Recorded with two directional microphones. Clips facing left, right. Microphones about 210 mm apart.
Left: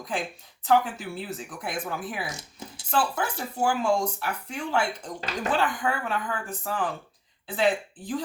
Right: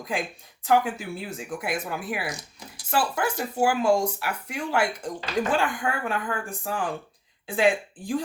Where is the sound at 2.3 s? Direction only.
25° left (ahead or behind).